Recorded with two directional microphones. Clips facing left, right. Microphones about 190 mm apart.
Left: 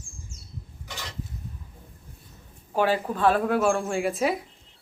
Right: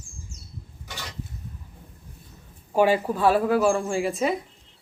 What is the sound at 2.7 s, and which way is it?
A woman's voice, 10° right (ahead or behind).